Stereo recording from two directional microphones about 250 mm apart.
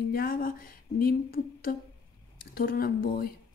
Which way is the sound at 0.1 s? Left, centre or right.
Left.